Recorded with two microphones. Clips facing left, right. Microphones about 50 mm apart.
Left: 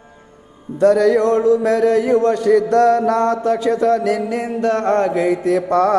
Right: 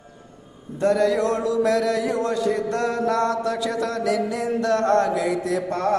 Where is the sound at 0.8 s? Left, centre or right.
Left.